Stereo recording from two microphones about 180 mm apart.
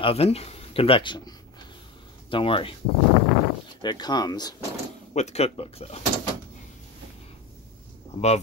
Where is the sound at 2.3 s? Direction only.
30° left (ahead or behind).